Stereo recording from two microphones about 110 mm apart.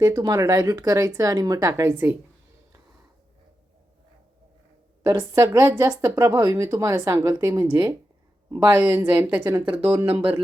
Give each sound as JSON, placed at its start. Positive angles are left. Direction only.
{"t": 0.0, "sound": "speech", "side_deg": -35}
{"t": 5.3, "sound": "speech", "side_deg": -30}